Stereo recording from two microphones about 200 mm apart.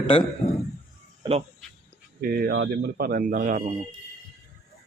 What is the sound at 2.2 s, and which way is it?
Speech, 50° right (ahead or behind).